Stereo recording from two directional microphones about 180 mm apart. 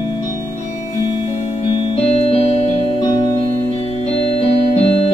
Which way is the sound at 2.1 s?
35° left (ahead or behind).